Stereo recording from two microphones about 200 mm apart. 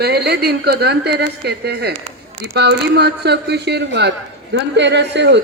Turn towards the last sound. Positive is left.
turn(degrees=-60)  # may be behind; listen again after turning